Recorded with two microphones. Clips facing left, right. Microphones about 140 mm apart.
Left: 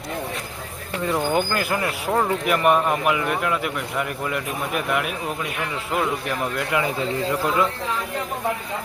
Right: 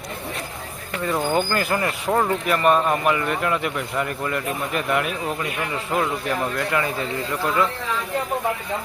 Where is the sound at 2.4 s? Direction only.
15° left (ahead or behind).